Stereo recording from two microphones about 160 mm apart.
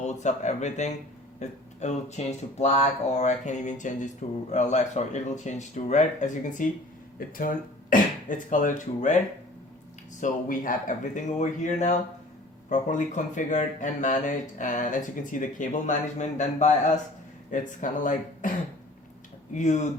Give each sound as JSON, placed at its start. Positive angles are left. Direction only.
{"t": 0.0, "sound": "speech", "side_deg": 45}
{"t": 10.2, "sound": "speech", "side_deg": 55}
{"t": 19.5, "sound": "speech", "side_deg": 50}